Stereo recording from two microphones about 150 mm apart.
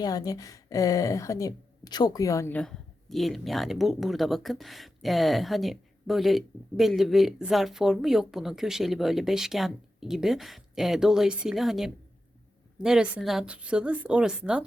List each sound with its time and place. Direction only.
0.0 s a woman's voice: 25° left (ahead or behind)
2.5 s a woman's voice: 5° left (ahead or behind)